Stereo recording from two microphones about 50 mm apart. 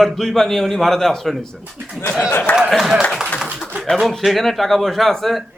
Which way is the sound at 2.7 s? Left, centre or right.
Centre.